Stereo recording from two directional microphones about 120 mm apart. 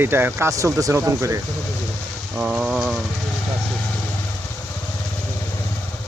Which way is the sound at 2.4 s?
5° right (ahead or behind).